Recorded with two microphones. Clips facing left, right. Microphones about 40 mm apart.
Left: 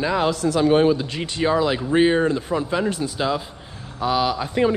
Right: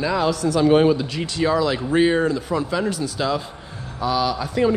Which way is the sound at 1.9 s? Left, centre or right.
Centre.